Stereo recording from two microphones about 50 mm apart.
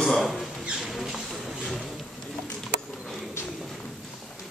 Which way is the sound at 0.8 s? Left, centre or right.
Centre.